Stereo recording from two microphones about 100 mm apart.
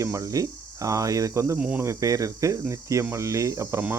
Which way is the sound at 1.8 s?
30° right (ahead or behind).